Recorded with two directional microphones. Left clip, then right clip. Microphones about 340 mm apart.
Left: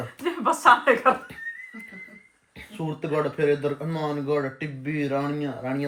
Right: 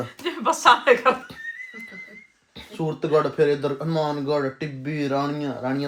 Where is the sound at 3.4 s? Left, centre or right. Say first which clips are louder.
Right 2 dB; centre.